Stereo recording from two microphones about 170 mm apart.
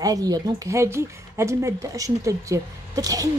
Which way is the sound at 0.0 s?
20° right (ahead or behind).